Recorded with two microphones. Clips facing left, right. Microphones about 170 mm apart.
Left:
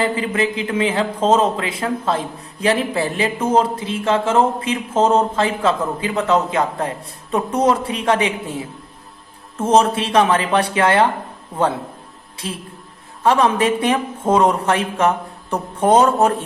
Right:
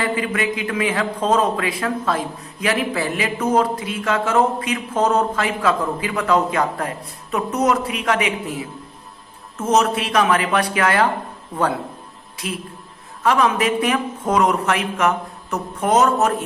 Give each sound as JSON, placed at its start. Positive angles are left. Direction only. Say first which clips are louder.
{"t": 0.0, "sound": "a man's voice", "louder": "left 2 dB", "side_deg": 30}
{"t": 12.4, "sound": "a man's voice", "louder": "right 1 dB", "side_deg": 30}